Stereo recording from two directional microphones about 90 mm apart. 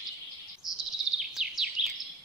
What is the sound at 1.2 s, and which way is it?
Bird vocalization, 5° right (ahead or behind).